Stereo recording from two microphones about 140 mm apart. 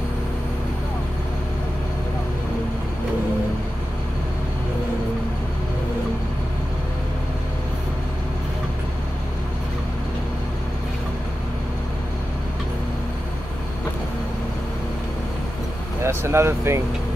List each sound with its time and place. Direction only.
16.0 s vehicle: 20° right (ahead or behind)